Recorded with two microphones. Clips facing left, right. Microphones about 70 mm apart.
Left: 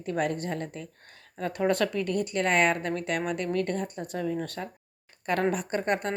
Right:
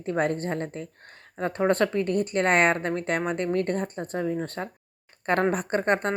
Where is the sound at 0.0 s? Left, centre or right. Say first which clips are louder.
Right 3 dB; right.